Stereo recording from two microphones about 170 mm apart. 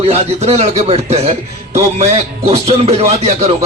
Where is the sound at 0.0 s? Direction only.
35° right (ahead or behind).